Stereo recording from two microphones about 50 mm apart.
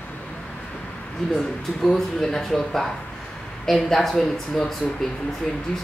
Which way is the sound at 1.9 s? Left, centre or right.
Centre.